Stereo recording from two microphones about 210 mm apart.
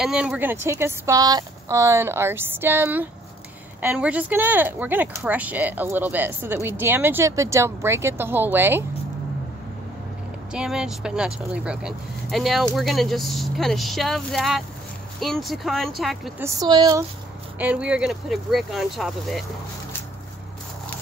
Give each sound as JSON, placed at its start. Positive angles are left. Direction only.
{"t": 0.0, "sound": "speech", "side_deg": -5}
{"t": 10.5, "sound": "speech", "side_deg": -5}
{"t": 16.4, "sound": "speech", "side_deg": -20}
{"t": 17.6, "sound": "speech", "side_deg": -5}